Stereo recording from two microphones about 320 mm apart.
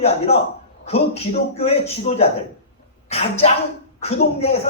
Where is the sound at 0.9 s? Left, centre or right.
Centre.